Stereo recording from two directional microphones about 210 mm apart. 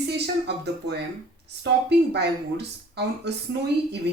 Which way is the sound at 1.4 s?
55° right (ahead or behind).